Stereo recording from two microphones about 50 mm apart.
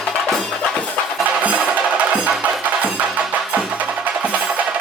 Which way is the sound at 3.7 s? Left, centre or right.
Right.